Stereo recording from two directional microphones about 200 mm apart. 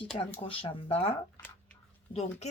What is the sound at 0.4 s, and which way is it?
Speech, 30° left (ahead or behind).